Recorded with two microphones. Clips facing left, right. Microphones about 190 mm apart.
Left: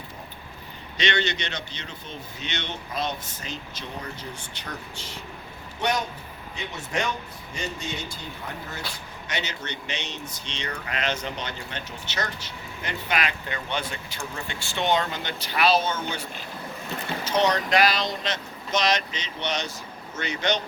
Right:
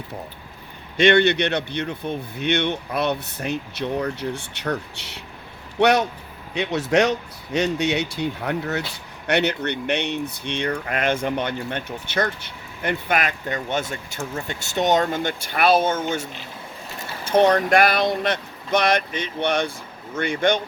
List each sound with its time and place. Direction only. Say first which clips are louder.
0.9 s speech: right 11 dB; 55° right (ahead or behind)